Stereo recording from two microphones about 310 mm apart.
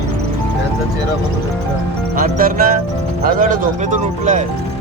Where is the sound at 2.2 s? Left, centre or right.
Right.